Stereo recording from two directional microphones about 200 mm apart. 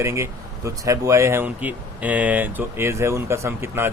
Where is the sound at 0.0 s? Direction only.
15° right (ahead or behind).